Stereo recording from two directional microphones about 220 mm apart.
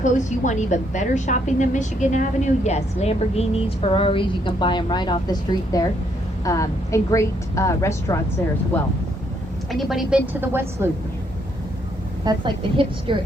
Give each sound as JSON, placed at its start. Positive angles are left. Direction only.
{"t": 0.0, "sound": "a woman's voice", "side_deg": 35}
{"t": 12.2, "sound": "a woman's voice", "side_deg": -20}